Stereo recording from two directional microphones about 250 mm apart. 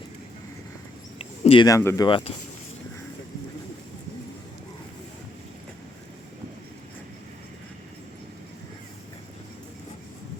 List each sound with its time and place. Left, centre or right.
1.2 s speech: left